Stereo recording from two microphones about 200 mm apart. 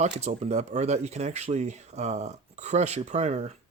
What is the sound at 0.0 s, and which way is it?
Speech, 35° right (ahead or behind).